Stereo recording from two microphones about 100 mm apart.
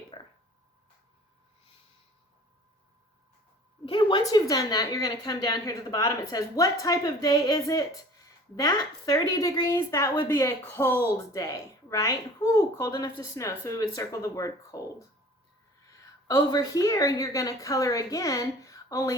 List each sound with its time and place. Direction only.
0.1 s a sound: 60° left (ahead or behind)
3.8 s a woman's voice: 50° left (ahead or behind)
4.2 s a woman's voice: 35° left (ahead or behind)
10.2 s speech: 25° left (ahead or behind)
11.3 s a woman's voice: 35° left (ahead or behind)
16.2 s a woman's voice: 40° left (ahead or behind)